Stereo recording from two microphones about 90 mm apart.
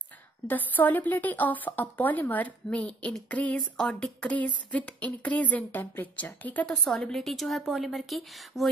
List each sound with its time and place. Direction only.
0.5 s speech: 20° left (ahead or behind)
3.3 s a sound: 15° left (ahead or behind)
6.8 s a woman's voice: 5° left (ahead or behind)